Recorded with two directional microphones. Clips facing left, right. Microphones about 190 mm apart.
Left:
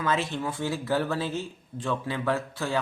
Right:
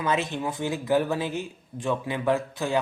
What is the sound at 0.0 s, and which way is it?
Speech, 20° right (ahead or behind).